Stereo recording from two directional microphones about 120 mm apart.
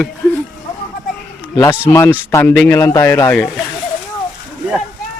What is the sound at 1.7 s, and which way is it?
Speech, 25° left (ahead or behind).